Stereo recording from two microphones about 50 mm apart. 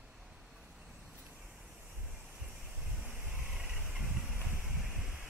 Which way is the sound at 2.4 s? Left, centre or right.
Right.